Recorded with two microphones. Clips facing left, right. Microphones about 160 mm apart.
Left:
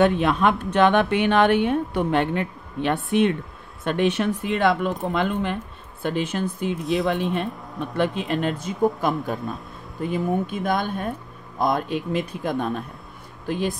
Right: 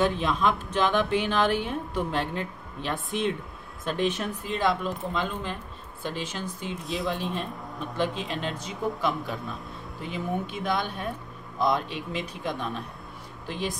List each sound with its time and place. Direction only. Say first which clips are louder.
0.0 s a woman's voice: left 6 dB; 65° left (ahead or behind)
6.8 s speech: left 9 dB; centre (ahead or behind)
7.1 s a woman's voice: left 6 dB; 60° left (ahead or behind)